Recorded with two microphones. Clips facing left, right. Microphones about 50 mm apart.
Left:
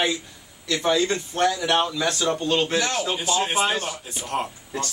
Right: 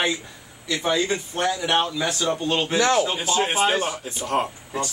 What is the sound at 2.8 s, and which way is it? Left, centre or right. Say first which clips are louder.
Speech: right 6 dB; right.